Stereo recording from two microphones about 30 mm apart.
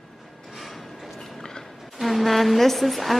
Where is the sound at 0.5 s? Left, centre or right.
Centre.